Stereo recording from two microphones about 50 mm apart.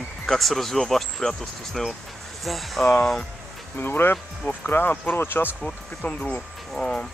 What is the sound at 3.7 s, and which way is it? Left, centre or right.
Speech, left.